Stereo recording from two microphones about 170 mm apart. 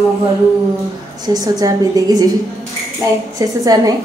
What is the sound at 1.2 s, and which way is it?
A woman's voice, 20° right (ahead or behind).